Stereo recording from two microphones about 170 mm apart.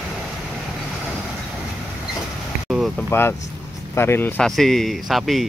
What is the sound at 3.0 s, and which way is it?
Speech, 15° left (ahead or behind).